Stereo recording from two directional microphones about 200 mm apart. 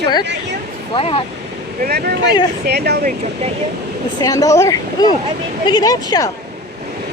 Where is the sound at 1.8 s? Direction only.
50° right (ahead or behind).